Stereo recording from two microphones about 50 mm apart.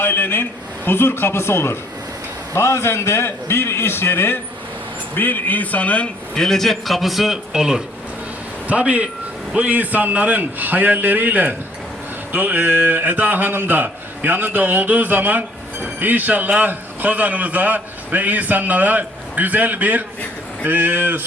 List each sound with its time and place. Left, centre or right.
0.0 s a sound: left
0.9 s a man's voice: left
5.1 s speech: left
6.3 s a man's voice: centre
7.5 s speech: centre
8.6 s a man's voice: right